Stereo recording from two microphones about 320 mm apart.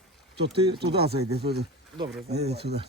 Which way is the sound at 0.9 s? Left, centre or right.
Right.